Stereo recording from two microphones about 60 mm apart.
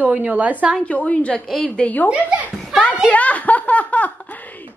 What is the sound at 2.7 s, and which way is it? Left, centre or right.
Speech, centre.